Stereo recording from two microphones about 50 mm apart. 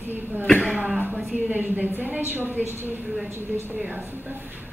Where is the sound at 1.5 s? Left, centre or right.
Right.